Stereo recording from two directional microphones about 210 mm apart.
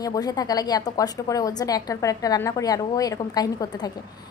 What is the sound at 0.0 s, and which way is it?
A woman's voice, 15° left (ahead or behind).